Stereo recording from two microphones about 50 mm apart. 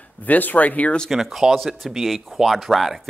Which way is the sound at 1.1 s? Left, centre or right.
Centre.